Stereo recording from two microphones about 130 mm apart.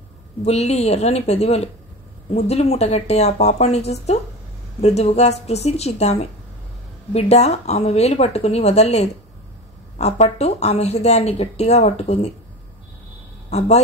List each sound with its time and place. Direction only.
0.5 s speech: 55° left (ahead or behind)
13.5 s speech: 60° left (ahead or behind)